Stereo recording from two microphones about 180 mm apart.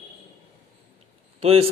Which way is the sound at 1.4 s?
35° right (ahead or behind).